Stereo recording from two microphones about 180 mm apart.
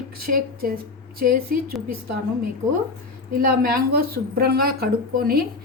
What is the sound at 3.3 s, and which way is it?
A woman's voice, 55° right (ahead or behind).